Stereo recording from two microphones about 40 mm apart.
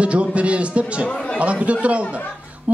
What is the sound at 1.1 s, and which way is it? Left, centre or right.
Speech, left.